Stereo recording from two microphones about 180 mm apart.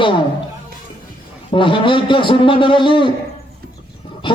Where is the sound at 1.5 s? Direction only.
30° left (ahead or behind).